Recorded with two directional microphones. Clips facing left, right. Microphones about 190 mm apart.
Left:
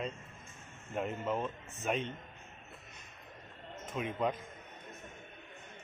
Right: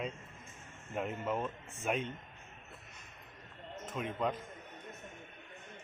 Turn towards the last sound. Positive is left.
turn(degrees=5)  # may be behind; listen again after turning